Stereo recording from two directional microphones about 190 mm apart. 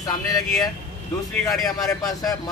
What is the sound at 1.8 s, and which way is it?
Speech, 20° left (ahead or behind).